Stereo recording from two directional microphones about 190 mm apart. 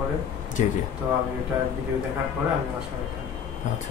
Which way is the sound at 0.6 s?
40° left (ahead or behind).